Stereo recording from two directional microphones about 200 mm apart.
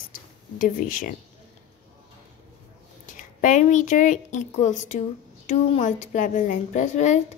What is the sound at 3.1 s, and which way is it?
A woman's voice, 40° left (ahead or behind).